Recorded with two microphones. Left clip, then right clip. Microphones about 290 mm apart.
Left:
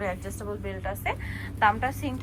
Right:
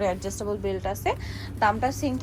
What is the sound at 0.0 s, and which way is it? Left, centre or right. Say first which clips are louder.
A woman's voice: right 5 dB; centre.